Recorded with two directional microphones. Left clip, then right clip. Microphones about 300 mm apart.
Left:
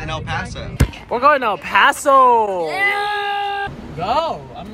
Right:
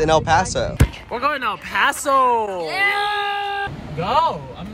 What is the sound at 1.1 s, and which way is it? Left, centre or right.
Speech, centre.